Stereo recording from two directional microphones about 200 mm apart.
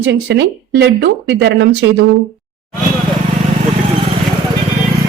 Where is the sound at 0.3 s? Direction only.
60° right (ahead or behind).